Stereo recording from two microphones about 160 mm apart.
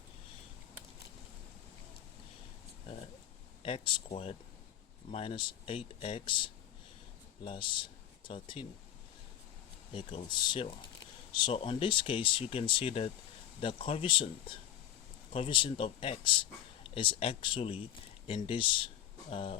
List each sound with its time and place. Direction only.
3.6 s speech: 35° left (ahead or behind)
9.9 s speech: 30° left (ahead or behind)